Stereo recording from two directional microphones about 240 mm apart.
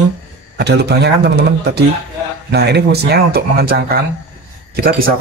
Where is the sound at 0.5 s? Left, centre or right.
Right.